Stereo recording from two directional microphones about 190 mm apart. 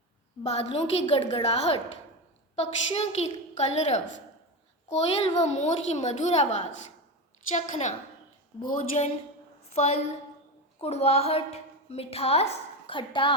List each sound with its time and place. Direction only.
0.4 s a child's voice: 35° left (ahead or behind)
7.5 s a child's voice: 40° left (ahead or behind)
9.7 s a child's voice: 35° left (ahead or behind)